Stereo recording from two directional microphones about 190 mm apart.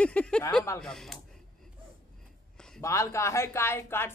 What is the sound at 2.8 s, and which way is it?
Speech, 15° left (ahead or behind).